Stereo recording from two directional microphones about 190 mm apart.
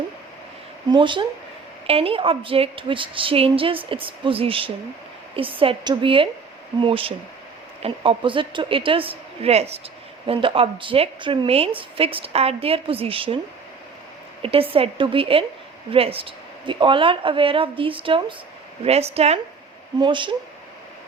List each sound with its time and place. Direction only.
0.9 s a woman's voice: 25° right (ahead or behind)
14.4 s a woman's voice: 30° right (ahead or behind)